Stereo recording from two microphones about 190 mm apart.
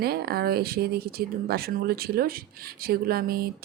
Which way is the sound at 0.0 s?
55° right (ahead or behind).